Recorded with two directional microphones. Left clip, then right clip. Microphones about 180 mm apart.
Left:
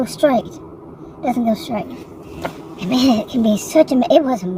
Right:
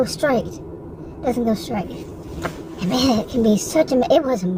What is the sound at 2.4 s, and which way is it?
Speech, 20° left (ahead or behind).